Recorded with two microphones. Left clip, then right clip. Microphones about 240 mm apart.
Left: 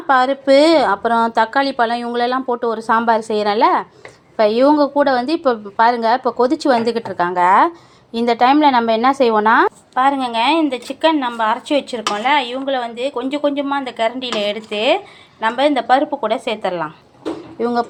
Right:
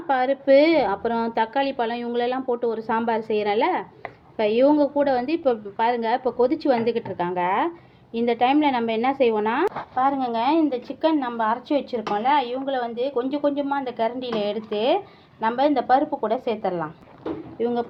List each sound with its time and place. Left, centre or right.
0.1 s a woman's voice: centre